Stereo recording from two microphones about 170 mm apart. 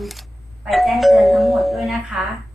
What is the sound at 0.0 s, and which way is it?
Doorbell, centre (ahead or behind).